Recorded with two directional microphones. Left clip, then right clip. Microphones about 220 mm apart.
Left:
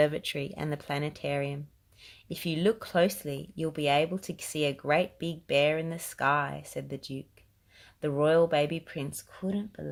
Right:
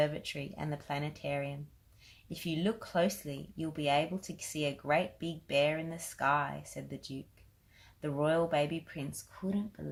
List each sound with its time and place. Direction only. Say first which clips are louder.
0.0 s speech: left 6 dB; 50° left (ahead or behind)